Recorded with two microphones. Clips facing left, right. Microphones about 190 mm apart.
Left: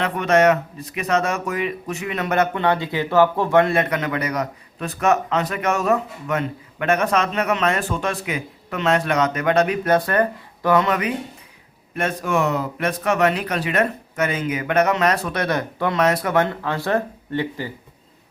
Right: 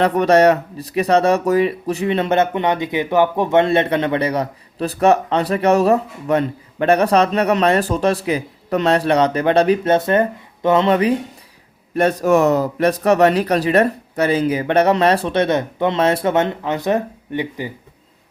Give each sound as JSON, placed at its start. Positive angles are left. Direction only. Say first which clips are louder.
{"t": 0.0, "sound": "speech", "louder": "right 4 dB", "side_deg": -35}
{"t": 11.9, "sound": "speech", "louder": "right 7 dB", "side_deg": -40}